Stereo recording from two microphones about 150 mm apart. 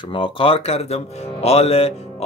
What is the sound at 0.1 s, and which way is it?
Speech, 35° left (ahead or behind).